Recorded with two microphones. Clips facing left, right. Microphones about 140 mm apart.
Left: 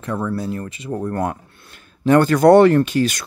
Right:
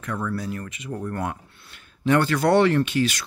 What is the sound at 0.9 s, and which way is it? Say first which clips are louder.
Speech: left 6 dB; 40° left (ahead or behind).